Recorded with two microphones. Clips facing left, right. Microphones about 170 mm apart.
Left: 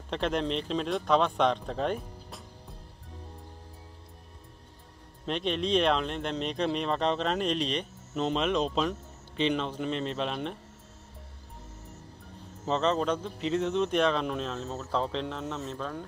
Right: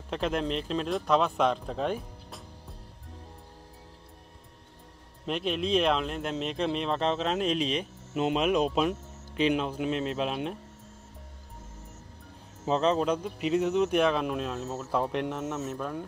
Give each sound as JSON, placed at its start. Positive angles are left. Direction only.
{"t": 0.1, "sound": "speech", "side_deg": -5}
{"t": 5.2, "sound": "speech", "side_deg": -5}
{"t": 12.6, "sound": "speech", "side_deg": -10}